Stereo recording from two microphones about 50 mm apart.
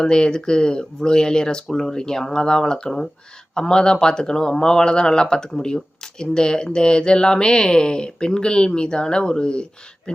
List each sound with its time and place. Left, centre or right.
0.0 s speech: centre